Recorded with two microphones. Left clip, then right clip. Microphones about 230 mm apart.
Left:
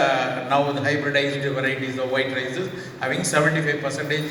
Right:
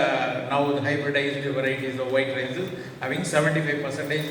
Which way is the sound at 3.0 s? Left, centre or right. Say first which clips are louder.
Left 3 dB; left.